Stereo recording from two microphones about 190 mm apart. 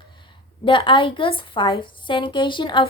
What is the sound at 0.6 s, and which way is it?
A woman's voice, 25° left (ahead or behind).